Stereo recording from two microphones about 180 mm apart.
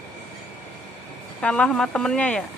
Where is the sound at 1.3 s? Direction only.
5° left (ahead or behind).